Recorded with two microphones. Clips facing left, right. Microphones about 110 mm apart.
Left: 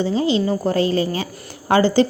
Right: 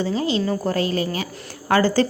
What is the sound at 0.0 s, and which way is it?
A woman's voice, 25° left (ahead or behind).